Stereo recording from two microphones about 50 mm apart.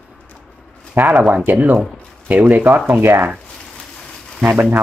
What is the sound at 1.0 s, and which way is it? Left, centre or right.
Speech, right.